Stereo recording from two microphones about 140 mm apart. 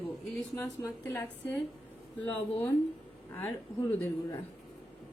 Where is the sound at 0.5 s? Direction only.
20° left (ahead or behind).